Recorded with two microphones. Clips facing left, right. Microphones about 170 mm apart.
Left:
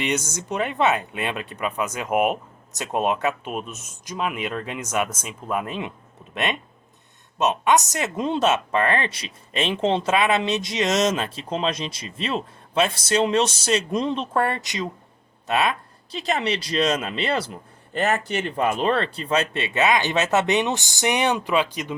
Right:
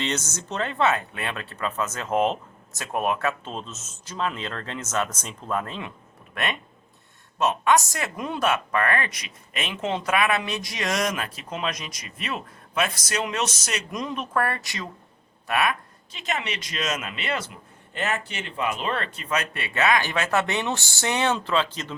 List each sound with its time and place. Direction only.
0.0 s a woman's voice: 10° left (ahead or behind)
16.1 s a woman's voice: 35° left (ahead or behind); by 21.9 s 15° left (ahead or behind)